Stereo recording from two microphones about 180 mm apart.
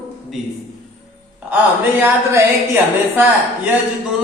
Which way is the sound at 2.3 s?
10° right (ahead or behind).